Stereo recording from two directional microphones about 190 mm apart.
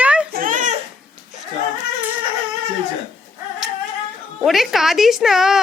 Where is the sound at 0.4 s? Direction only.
45° right (ahead or behind).